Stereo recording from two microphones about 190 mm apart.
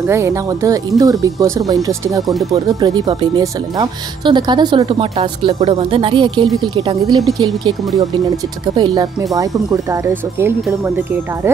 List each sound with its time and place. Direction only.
0.1 s speech: 15° right (ahead or behind)
8.7 s speech: 20° right (ahead or behind)